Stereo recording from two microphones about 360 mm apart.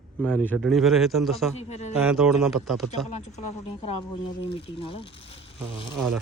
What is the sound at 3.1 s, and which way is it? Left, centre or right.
Speech, centre.